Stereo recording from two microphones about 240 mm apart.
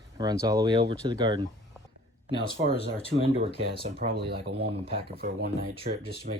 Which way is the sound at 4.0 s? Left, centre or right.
Right.